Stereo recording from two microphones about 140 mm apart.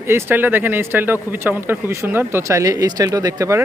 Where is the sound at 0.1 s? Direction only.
15° right (ahead or behind).